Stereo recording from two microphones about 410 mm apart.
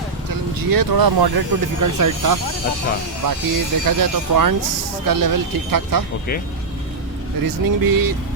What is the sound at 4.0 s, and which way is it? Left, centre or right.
Speech, right.